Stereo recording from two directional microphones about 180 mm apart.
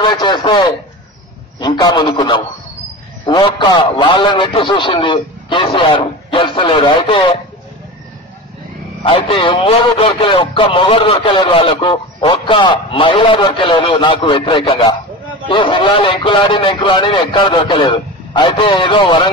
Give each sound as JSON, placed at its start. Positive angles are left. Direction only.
{"t": 0.0, "sound": "a man's voice", "side_deg": 25}
{"t": 9.0, "sound": "a man's voice", "side_deg": 30}